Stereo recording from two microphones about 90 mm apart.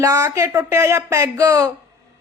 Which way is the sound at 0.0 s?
40° right (ahead or behind).